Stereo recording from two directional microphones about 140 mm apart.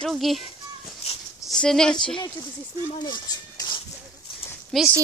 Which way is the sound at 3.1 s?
30° left (ahead or behind).